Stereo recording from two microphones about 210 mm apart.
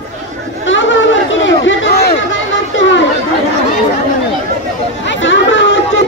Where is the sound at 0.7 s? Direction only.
65° left (ahead or behind).